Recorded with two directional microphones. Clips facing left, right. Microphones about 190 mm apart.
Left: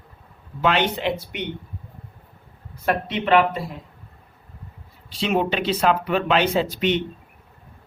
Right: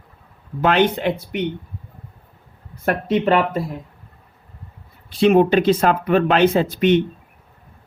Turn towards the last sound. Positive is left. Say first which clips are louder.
# right 5 dB
turn(degrees=-50)  # may be behind; listen again after turning